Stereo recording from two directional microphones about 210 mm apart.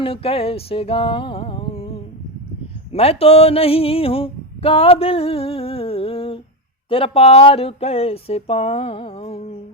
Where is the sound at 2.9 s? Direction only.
30° left (ahead or behind).